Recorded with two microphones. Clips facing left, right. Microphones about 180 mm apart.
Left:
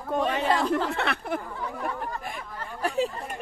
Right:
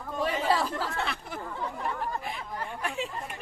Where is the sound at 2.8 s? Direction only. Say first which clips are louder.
Left 10 dB; 35° left (ahead or behind).